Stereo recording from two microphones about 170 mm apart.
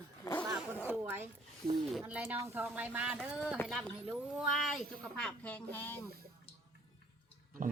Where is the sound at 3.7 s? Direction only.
Centre (ahead or behind).